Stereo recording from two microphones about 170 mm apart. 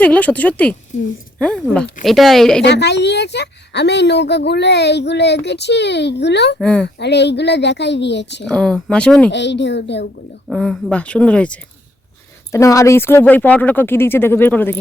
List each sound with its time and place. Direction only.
0.0 s speech: 10° left (ahead or behind)
2.6 s a woman's voice: 85° left
6.6 s speech: 5° left (ahead or behind)
6.8 s speech: 85° left
8.4 s speech: 5° left (ahead or behind)
9.3 s speech: 90° left
10.5 s speech: 5° left (ahead or behind)
12.5 s speech: 15° left (ahead or behind)